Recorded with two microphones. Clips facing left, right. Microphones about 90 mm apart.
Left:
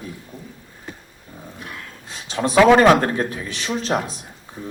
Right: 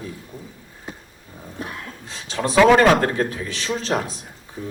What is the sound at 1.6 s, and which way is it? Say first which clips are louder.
Dog: right 6 dB; 35° right (ahead or behind).